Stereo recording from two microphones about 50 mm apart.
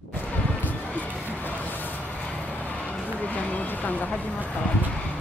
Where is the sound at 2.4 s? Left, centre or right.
Left.